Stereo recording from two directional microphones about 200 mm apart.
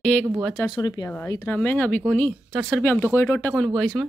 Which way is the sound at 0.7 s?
20° left (ahead or behind).